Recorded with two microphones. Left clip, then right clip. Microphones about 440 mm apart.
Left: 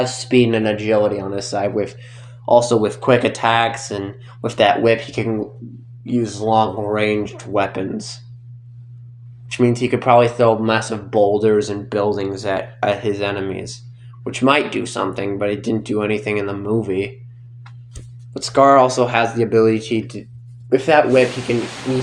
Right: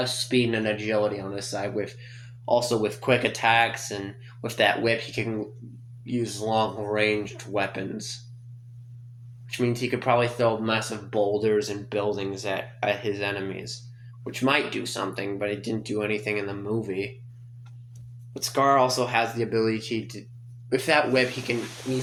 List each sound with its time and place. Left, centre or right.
0.0 s speech: right
6.3 s speech: right
9.5 s speech: right
18.5 s speech: right